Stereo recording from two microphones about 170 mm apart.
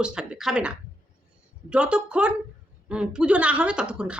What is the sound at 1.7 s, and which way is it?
Speech, 5° right (ahead or behind).